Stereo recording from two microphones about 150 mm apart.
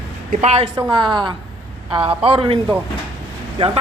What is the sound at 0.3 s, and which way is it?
Speech, 50° right (ahead or behind).